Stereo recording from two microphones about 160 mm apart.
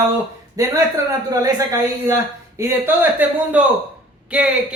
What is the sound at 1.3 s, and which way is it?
Speech, 20° right (ahead or behind).